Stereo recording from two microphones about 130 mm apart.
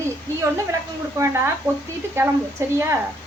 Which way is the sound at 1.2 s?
20° right (ahead or behind).